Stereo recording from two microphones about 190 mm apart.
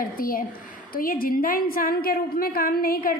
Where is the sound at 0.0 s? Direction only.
50° left (ahead or behind).